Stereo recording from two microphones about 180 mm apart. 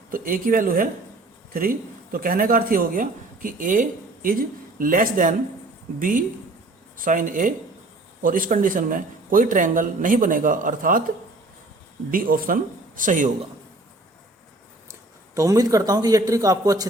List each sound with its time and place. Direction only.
0.1 s speech: 50° right (ahead or behind)
2.1 s speech: 50° right (ahead or behind)
12.1 s speech: 50° right (ahead or behind)
15.4 s speech: 20° right (ahead or behind)